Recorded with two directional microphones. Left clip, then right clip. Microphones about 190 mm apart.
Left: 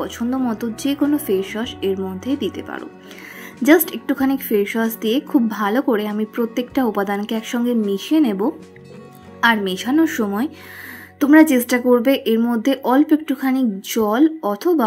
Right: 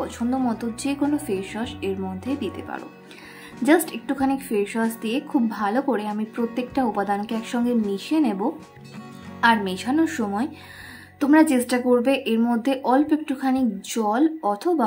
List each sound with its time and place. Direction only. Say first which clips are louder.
0.0 s speech: left 2 dB; 20° left (ahead or behind)